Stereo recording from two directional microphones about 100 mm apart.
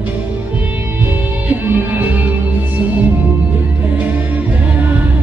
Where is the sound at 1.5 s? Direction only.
15° right (ahead or behind).